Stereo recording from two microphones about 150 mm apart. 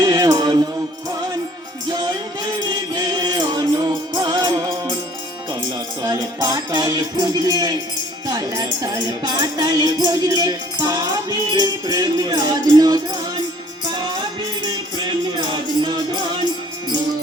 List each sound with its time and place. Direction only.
0.0 s music: 25° right (ahead or behind)
1.9 s music: 25° right (ahead or behind)
6.0 s music: 25° right (ahead or behind)
14.6 s music: 30° right (ahead or behind)